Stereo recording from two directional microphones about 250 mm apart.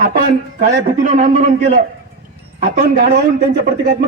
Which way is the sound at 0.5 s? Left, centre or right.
Right.